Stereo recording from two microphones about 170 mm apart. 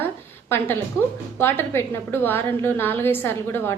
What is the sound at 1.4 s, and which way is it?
A woman's voice, 15° left (ahead or behind).